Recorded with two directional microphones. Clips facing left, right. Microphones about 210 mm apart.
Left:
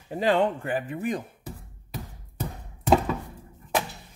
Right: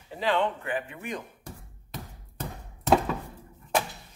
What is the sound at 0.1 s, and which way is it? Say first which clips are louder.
Speech: left 4 dB; 45° left (ahead or behind).